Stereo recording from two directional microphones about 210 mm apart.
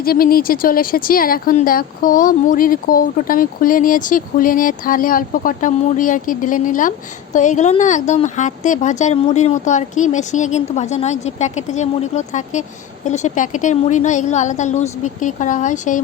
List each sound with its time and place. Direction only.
0.0 s speech: 45° left (ahead or behind)